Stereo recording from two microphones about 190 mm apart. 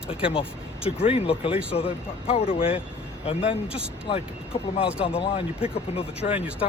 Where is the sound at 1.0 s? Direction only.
30° left (ahead or behind).